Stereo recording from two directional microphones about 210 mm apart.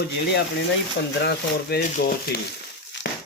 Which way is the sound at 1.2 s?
50° left (ahead or behind).